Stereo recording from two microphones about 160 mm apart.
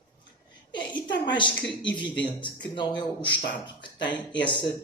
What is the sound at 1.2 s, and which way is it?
Speech, 30° left (ahead or behind).